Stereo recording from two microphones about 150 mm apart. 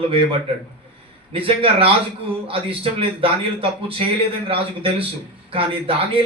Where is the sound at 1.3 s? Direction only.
40° right (ahead or behind).